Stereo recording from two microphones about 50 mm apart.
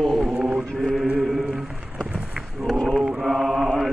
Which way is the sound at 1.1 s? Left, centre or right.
Centre.